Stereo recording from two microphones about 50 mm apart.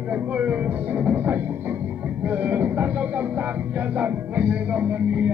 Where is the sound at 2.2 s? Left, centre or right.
Right.